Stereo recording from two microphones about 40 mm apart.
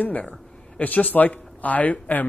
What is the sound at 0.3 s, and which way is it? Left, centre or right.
Speech, left.